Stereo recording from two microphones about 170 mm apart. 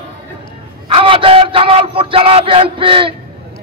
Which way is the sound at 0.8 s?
30° right (ahead or behind).